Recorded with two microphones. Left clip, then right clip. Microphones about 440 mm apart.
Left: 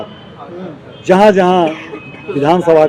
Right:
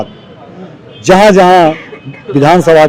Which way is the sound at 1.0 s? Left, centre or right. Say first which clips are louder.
Right 4 dB; right.